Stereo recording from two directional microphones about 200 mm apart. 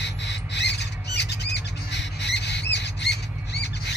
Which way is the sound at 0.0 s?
60° left (ahead or behind).